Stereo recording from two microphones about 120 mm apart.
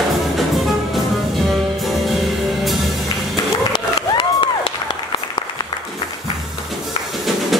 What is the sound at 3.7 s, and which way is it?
Crowd, 40° left (ahead or behind).